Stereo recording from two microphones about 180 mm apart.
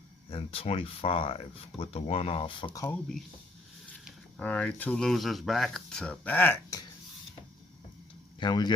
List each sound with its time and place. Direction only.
0.3 s speech: 30° left (ahead or behind)
2.8 s speech: 5° left (ahead or behind)
8.4 s speech: 25° left (ahead or behind)